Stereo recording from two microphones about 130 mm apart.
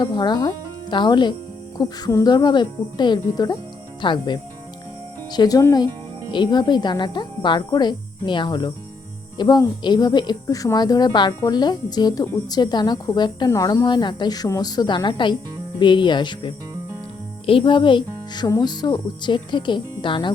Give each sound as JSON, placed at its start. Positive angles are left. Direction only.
{"t": 0.0, "sound": "speech", "side_deg": 35}
{"t": 13.5, "sound": "speech", "side_deg": 25}